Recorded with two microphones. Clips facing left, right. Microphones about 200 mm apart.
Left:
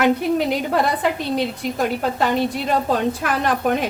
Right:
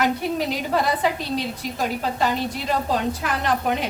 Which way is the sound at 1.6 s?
55° left (ahead or behind).